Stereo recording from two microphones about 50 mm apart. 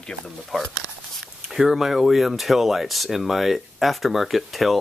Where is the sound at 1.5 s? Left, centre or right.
Centre.